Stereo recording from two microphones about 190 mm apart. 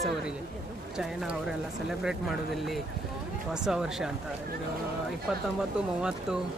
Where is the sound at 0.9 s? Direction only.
Centre (ahead or behind).